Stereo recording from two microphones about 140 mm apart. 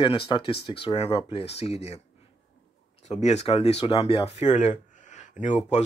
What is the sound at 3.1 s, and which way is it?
Speech, 50° left (ahead or behind).